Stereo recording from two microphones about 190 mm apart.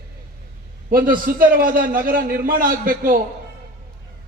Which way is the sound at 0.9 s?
50° right (ahead or behind).